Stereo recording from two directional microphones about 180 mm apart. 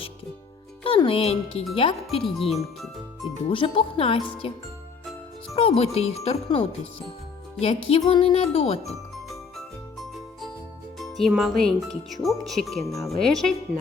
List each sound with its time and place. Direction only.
0.9 s speech: 30° left (ahead or behind)
2.2 s speech: centre (ahead or behind)
3.5 s speech: 30° left (ahead or behind)
5.5 s speech: 35° left (ahead or behind)
9.3 s music: centre (ahead or behind)
10.9 s speech: centre (ahead or behind)